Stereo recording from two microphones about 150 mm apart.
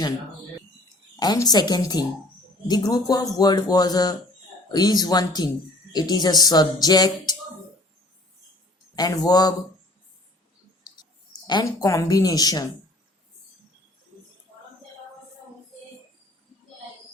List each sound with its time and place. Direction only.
1.2 s a man's voice: 25° left (ahead or behind)
9.0 s a man's voice: 25° left (ahead or behind)
11.4 s a man's voice: 25° left (ahead or behind)